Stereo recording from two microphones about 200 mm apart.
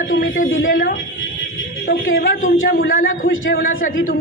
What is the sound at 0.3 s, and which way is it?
Speech, 45° left (ahead or behind).